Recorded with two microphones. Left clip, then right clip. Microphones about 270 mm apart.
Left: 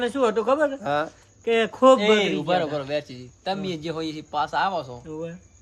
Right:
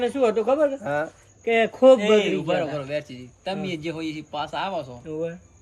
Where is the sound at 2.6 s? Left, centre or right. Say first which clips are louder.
Left 1 dB; centre.